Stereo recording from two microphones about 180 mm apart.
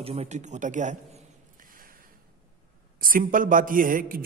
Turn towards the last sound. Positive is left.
turn(degrees=-50)  # may be behind; listen again after turning